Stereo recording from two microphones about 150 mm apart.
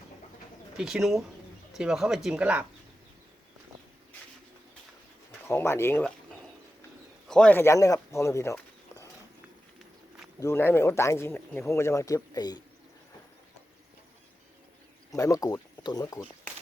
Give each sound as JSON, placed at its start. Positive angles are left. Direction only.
{"t": 0.8, "sound": "speech", "side_deg": -5}
{"t": 5.4, "sound": "speech", "side_deg": 15}
{"t": 7.3, "sound": "a man's voice", "side_deg": 5}
{"t": 7.6, "sound": "speech", "side_deg": 20}
{"t": 10.4, "sound": "speech", "side_deg": 15}
{"t": 15.1, "sound": "speech", "side_deg": 25}